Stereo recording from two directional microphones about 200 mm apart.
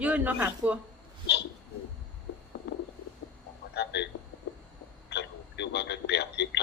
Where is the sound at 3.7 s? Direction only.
60° left (ahead or behind).